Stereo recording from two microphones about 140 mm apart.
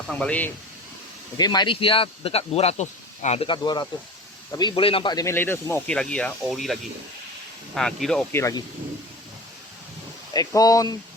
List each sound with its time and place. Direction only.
0.1 s speech: 10° left (ahead or behind)
1.4 s speech: 30° left (ahead or behind); by 3.4 s 55° left (ahead or behind)
3.4 s speech: 35° left (ahead or behind)
5.1 s speech: 20° left (ahead or behind); by 8.3 s 5° left (ahead or behind)
8.3 s speech: 20° left (ahead or behind)
10.3 s speech: 25° left (ahead or behind)